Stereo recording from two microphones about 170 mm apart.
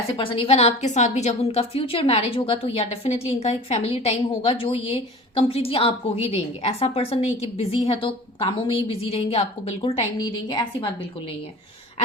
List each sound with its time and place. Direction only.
0.2 s a woman's voice: 30° left (ahead or behind)
10.2 s a woman's voice: 25° left (ahead or behind)